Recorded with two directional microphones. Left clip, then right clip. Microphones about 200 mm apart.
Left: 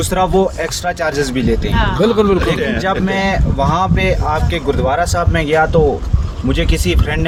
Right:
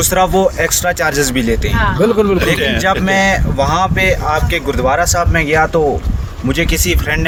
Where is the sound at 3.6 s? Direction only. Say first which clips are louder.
Right 1 dB; 10° right (ahead or behind).